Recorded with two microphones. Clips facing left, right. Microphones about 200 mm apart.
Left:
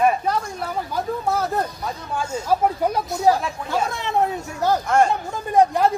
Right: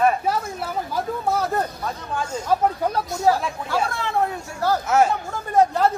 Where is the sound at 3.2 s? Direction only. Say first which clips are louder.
Left 1 dB; 20° left (ahead or behind).